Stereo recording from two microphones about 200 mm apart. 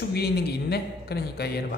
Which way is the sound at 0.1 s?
55° left (ahead or behind).